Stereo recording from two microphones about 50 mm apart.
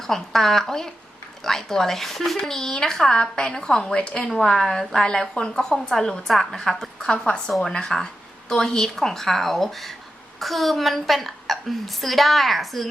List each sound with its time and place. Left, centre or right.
0.0 s a woman's voice: centre